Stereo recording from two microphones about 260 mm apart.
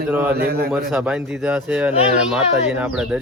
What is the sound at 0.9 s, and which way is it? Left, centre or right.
A man's voice, centre.